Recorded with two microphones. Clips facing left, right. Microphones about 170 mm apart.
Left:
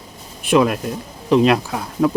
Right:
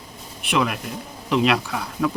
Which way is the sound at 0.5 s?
40° left (ahead or behind).